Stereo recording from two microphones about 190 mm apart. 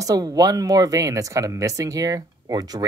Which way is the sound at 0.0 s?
20° right (ahead or behind).